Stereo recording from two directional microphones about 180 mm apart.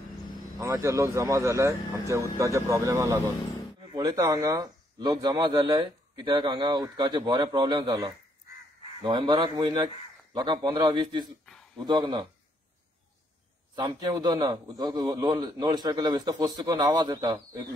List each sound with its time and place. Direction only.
0.6 s speech: 15° right (ahead or behind)
13.7 s speech: 25° right (ahead or behind)